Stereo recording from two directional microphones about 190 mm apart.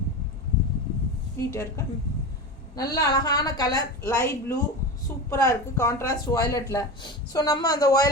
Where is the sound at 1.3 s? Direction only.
15° left (ahead or behind).